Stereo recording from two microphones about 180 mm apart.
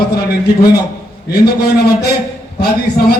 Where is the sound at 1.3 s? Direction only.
60° left (ahead or behind).